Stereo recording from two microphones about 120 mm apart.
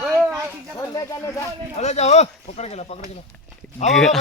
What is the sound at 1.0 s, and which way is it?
Speech, 25° left (ahead or behind).